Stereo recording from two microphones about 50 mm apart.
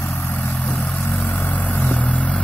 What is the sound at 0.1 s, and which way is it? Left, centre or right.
Vehicle, left.